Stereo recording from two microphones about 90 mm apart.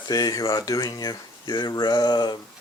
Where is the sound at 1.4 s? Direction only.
60° left (ahead or behind).